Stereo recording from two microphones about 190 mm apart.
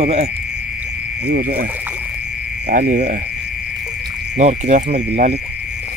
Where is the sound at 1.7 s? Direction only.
10° right (ahead or behind).